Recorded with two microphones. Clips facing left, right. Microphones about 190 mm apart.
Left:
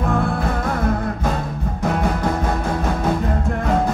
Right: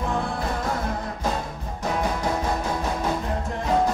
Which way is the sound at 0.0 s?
55° left (ahead or behind).